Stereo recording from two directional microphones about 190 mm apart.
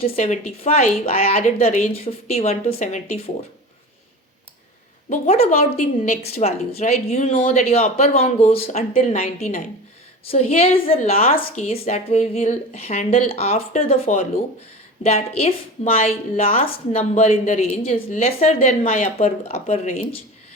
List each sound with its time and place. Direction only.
0.0 s a woman's voice: 40° left (ahead or behind)
5.0 s a woman's voice: 40° left (ahead or behind)